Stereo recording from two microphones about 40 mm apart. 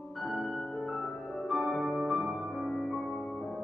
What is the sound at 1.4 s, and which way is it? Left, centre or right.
Music, centre.